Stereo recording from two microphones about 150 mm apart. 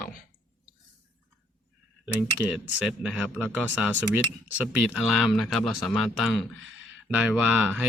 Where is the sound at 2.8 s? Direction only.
5° right (ahead or behind).